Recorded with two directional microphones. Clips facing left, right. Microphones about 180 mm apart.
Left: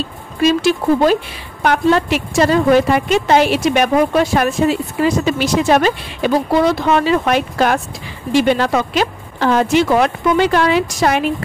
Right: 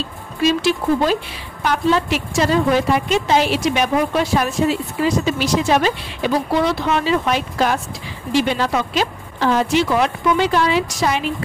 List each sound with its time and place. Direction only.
0.4 s a woman's voice: 50° left (ahead or behind)